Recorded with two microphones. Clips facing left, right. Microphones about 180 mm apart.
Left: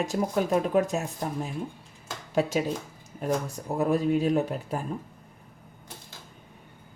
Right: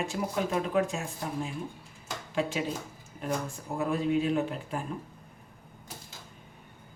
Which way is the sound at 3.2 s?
40° left (ahead or behind).